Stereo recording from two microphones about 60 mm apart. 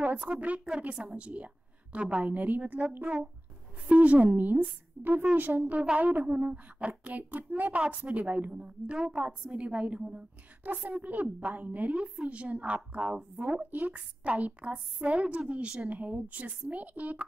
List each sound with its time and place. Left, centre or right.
0.3 s a woman's voice: right
10.6 s a woman's voice: right